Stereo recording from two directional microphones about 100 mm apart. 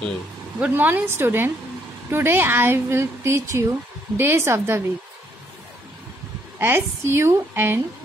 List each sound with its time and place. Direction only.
0.6 s speech: 15° right (ahead or behind)
6.6 s speech: 25° right (ahead or behind)